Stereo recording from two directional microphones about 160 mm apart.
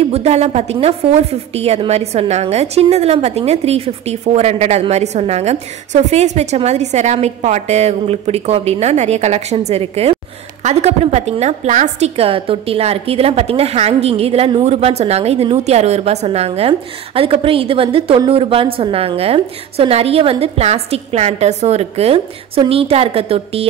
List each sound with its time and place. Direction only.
0.0 s a woman's voice: 40° right (ahead or behind)